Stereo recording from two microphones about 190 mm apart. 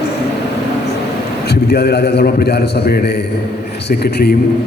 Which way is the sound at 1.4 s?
55° left (ahead or behind).